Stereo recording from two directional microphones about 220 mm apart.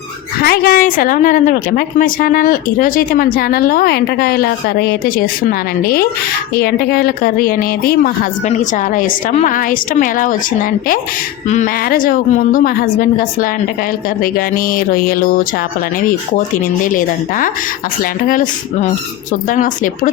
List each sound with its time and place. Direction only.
0.4 s a woman's voice: 45° left (ahead or behind)